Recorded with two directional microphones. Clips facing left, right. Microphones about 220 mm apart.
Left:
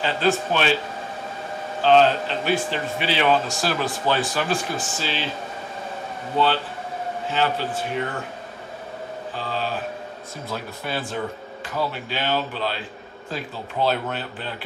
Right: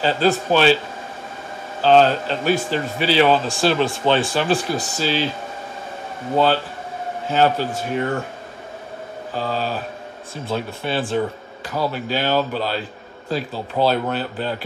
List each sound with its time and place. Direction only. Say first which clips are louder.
0.0 s a man's voice: right 3 dB; 35° right (ahead or behind)
1.8 s a man's voice: right 2 dB; 40° right (ahead or behind)
6.3 s a man's voice: right 4 dB; 40° right (ahead or behind)
9.3 s a man's voice: right 5 dB; 40° right (ahead or behind)
10.5 s speech: right 6 dB; 30° right (ahead or behind)
11.9 s a man's voice: right 5 dB; 40° right (ahead or behind)